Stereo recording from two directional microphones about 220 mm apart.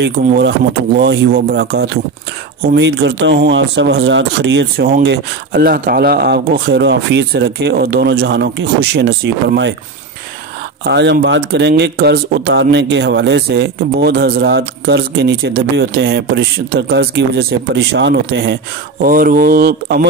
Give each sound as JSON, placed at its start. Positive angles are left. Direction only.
{"t": 0.9, "sound": "speech", "side_deg": -45}
{"t": 10.8, "sound": "speech", "side_deg": -50}
{"t": 19.0, "sound": "speech", "side_deg": -40}